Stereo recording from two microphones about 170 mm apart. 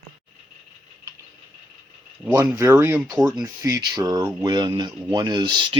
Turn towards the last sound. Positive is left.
turn(degrees=-25)  # may be behind; listen again after turning